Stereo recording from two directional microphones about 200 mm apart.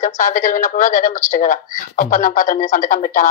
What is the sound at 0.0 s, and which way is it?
Speech, 40° left (ahead or behind).